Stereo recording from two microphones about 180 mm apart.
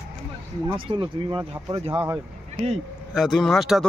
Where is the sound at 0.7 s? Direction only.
30° right (ahead or behind).